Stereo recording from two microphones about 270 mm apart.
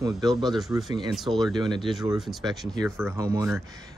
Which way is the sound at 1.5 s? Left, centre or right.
Centre.